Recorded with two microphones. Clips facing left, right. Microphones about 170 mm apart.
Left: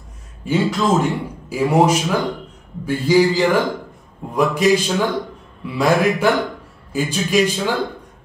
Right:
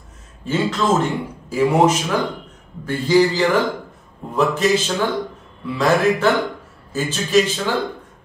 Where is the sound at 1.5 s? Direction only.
10° left (ahead or behind).